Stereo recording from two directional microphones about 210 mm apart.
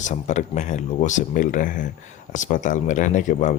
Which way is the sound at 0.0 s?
35° left (ahead or behind).